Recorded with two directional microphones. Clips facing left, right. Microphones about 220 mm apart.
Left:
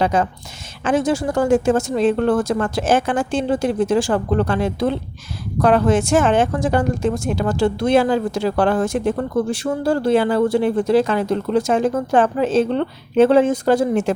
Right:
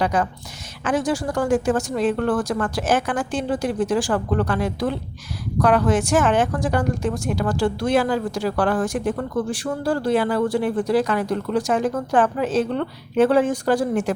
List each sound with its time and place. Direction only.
0.0 s a woman's voice: 25° left (ahead or behind)